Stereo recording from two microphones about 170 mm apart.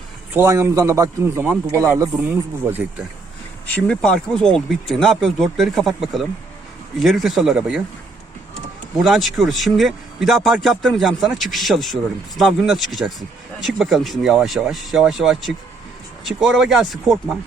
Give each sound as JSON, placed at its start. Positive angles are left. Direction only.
{"t": 0.3, "sound": "speech", "side_deg": -15}
{"t": 3.8, "sound": "speech", "side_deg": 5}
{"t": 9.0, "sound": "speech", "side_deg": 0}